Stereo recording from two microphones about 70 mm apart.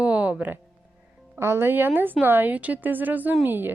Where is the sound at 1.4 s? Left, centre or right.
Right.